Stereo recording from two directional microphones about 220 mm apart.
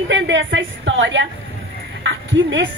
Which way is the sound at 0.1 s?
55° right (ahead or behind).